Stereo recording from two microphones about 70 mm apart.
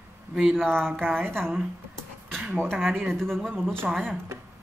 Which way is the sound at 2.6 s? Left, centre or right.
Centre.